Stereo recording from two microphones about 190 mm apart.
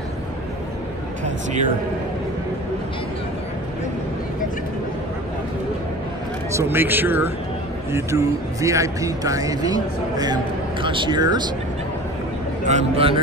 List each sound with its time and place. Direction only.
6.5 s a man's voice: 10° right (ahead or behind)
12.6 s a man's voice: 35° right (ahead or behind)